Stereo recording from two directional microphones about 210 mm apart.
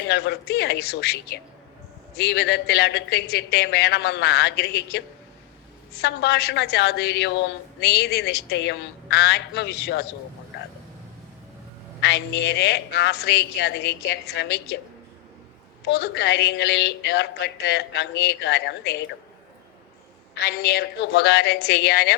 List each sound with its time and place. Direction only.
0.1 s a woman's voice: 50° left (ahead or behind)
11.9 s a woman's voice: 55° left (ahead or behind)
15.8 s a woman's voice: 50° left (ahead or behind)
20.3 s a woman's voice: 50° left (ahead or behind)